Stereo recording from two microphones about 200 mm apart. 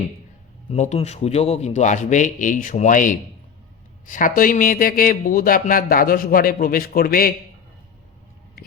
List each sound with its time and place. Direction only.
0.7 s a man's voice: 35° left (ahead or behind)